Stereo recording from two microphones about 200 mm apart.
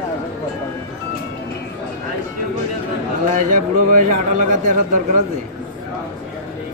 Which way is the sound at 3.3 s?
40° right (ahead or behind).